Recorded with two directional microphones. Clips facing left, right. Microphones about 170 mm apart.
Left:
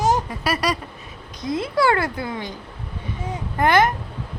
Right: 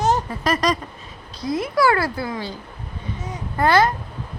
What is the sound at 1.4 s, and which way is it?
Speech, 25° left (ahead or behind).